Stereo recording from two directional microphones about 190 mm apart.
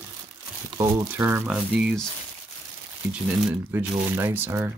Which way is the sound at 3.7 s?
10° right (ahead or behind).